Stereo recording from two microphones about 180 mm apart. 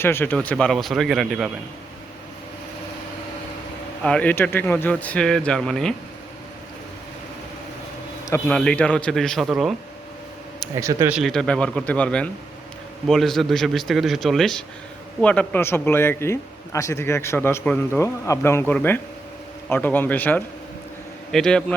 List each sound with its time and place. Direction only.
0.0 s a man's voice: 10° left (ahead or behind)
4.0 s a man's voice: 5° left (ahead or behind)
8.2 s a man's voice: 10° left (ahead or behind)
10.8 s speech: 15° right (ahead or behind)
11.1 s a man's voice: centre (ahead or behind)